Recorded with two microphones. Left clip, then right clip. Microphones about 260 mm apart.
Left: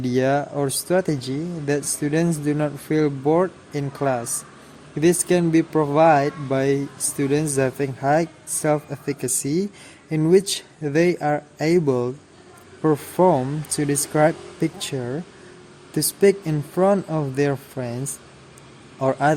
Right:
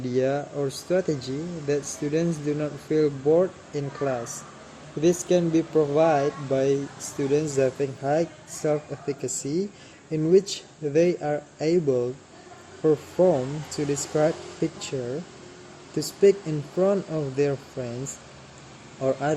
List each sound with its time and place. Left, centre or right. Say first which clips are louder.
0.0 s speech: left 4 dB; left
16.0 s speech: left 2 dB; left
19.0 s speech: left 5 dB; left